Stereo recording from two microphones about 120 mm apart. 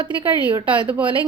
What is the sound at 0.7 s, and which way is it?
Speech, 10° right (ahead or behind).